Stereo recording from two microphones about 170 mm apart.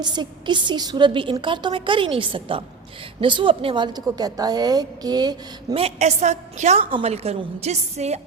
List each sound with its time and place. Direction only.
0.0 s a woman's voice: 25° right (ahead or behind)
5.8 s a woman's voice: 40° right (ahead or behind)